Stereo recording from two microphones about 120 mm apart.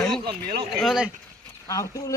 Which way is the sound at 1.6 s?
25° left (ahead or behind).